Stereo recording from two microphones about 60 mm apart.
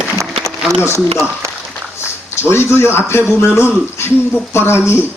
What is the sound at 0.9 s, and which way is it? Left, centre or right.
Speech, right.